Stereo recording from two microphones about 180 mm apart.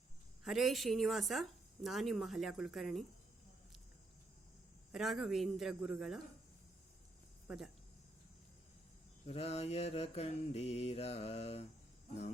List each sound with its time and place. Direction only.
0.4 s a woman's voice: centre (ahead or behind)
4.9 s a woman's voice: centre (ahead or behind)
7.4 s speech: centre (ahead or behind)
9.2 s mantra: 35° left (ahead or behind)